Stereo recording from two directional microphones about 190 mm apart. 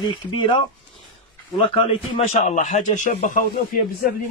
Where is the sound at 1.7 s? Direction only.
30° left (ahead or behind).